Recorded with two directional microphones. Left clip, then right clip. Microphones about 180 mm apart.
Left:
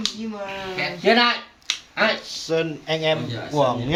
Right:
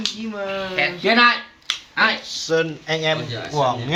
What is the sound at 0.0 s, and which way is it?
Speech, 25° left (ahead or behind).